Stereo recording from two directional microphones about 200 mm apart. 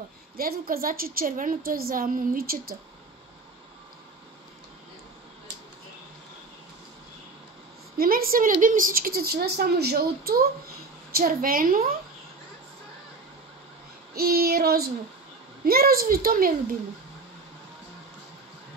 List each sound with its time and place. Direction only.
0.4 s a woman's voice: 45° right (ahead or behind)
8.0 s a woman's voice: 45° right (ahead or behind)
14.1 s a woman's voice: 50° right (ahead or behind)